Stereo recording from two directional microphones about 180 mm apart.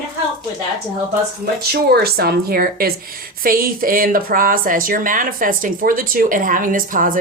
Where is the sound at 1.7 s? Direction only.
60° right (ahead or behind).